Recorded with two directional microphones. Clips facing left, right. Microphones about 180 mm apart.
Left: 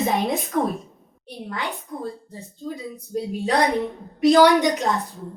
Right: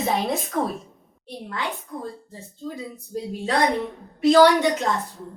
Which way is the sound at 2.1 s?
15° left (ahead or behind).